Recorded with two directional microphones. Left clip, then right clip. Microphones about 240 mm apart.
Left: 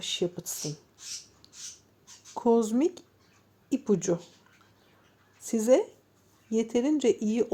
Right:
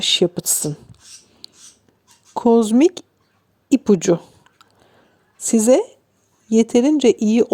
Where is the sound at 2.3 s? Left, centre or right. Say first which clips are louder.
Right 10 dB; right.